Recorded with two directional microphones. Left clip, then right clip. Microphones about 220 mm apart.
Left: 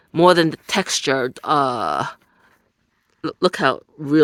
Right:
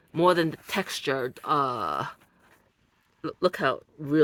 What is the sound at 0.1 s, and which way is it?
Speech, 45° left (ahead or behind).